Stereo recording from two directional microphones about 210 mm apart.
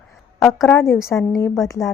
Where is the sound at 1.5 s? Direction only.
Centre (ahead or behind).